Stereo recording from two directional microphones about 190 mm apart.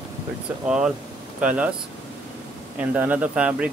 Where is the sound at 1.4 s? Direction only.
5° right (ahead or behind).